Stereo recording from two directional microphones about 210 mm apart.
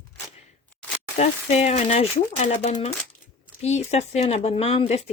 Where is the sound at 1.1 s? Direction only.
30° left (ahead or behind).